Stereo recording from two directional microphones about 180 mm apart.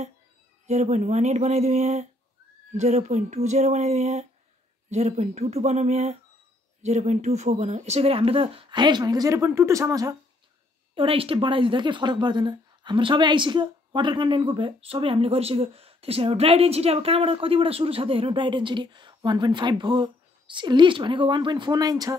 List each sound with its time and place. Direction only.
0.7 s speech: 40° right (ahead or behind); by 10.1 s 20° right (ahead or behind)
11.0 s speech: 30° right (ahead or behind)